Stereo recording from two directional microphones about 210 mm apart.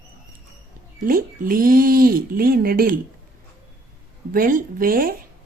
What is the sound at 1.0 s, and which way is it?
Speech, 40° right (ahead or behind).